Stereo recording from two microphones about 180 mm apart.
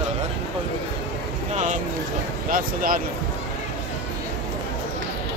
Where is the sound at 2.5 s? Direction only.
50° right (ahead or behind).